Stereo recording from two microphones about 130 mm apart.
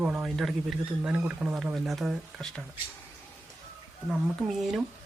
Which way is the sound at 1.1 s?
10° right (ahead or behind).